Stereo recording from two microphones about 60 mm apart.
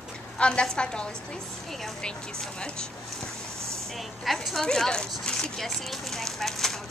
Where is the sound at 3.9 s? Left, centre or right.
Centre.